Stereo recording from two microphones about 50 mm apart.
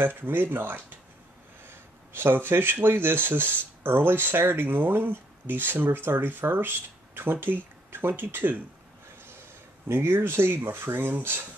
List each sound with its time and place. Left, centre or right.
0.0 s speech: right